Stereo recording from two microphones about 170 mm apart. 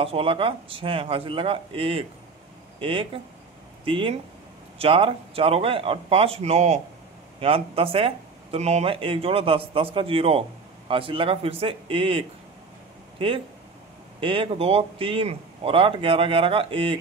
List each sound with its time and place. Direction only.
0.0 s speech: 35° right (ahead or behind)